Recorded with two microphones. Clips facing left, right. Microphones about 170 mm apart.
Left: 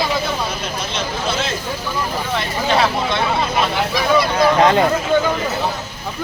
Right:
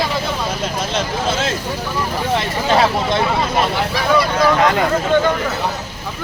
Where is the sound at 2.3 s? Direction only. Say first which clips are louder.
Right 2 dB; 40° right (ahead or behind).